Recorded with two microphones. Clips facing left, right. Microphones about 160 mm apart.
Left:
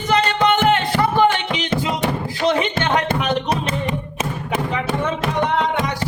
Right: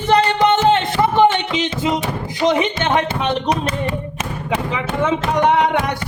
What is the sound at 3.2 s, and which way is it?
Speech, 30° right (ahead or behind).